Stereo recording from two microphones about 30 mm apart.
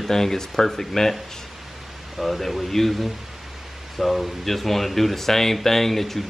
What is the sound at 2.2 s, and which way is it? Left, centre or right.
Speech, centre.